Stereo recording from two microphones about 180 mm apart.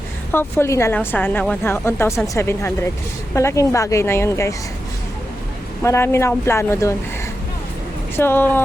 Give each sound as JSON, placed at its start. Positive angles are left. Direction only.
{"t": 0.3, "sound": "speech", "side_deg": 15}
{"t": 5.8, "sound": "speech", "side_deg": 15}
{"t": 8.1, "sound": "speech", "side_deg": 10}